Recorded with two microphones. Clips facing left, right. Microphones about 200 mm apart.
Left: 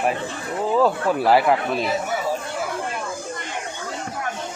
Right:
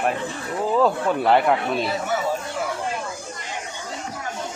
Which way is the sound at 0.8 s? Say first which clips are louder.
Left 1 dB; centre (ahead or behind).